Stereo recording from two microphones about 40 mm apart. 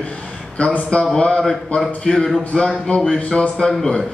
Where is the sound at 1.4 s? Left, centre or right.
Centre.